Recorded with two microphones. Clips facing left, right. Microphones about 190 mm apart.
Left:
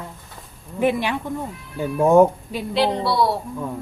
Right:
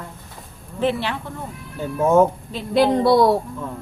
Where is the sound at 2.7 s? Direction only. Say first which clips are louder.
Right 6 dB; 50° right (ahead or behind).